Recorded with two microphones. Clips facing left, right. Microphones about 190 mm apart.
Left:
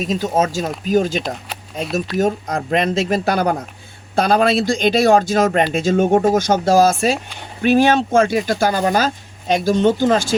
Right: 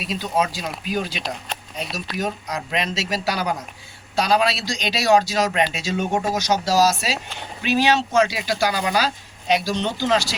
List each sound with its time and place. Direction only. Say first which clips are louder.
0.0 s speech: left 5 dB; 45° left (ahead or behind)